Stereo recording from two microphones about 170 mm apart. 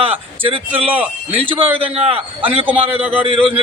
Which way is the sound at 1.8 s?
35° right (ahead or behind).